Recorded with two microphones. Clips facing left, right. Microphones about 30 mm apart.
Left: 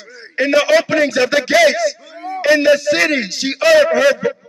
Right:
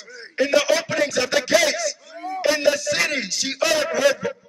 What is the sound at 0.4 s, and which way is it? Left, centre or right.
A man's voice, left.